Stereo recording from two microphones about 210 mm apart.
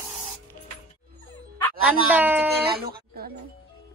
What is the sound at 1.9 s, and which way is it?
Speech, 5° right (ahead or behind).